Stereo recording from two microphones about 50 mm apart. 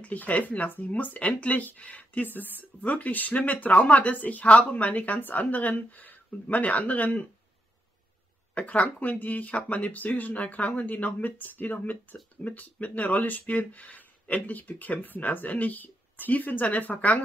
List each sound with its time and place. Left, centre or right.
0.0 s speech: left
2.2 s speech: left
8.5 s speech: left